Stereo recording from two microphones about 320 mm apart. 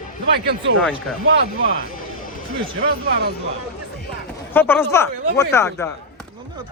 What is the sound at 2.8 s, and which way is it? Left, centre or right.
Speech, right.